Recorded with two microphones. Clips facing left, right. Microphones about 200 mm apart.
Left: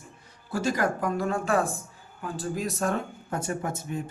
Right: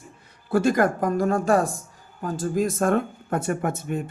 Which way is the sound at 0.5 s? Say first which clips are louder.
Right 7 dB; 55° right (ahead or behind).